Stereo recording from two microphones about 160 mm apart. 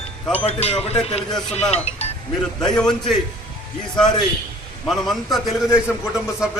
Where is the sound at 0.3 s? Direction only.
40° left (ahead or behind).